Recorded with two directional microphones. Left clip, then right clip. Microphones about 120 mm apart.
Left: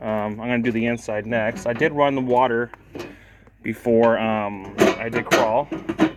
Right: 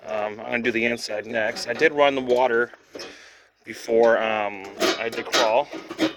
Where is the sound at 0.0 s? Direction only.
75° right (ahead or behind).